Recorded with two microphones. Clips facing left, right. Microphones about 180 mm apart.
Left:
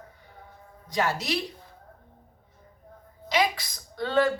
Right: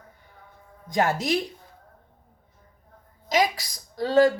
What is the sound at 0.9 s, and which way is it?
Speech, 50° right (ahead or behind).